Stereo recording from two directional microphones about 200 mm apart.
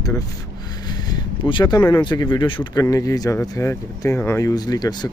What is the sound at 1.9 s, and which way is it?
Speech, 20° left (ahead or behind).